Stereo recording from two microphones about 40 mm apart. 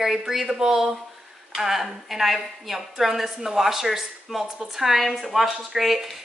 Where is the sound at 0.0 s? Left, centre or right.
Centre.